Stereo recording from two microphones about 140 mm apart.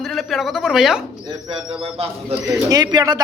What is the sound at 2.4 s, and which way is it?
Speech, 30° right (ahead or behind).